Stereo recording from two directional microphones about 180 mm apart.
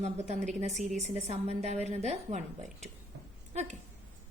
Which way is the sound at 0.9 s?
35° right (ahead or behind).